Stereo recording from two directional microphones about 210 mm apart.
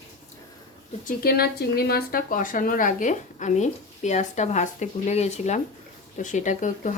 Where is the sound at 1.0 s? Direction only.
45° left (ahead or behind).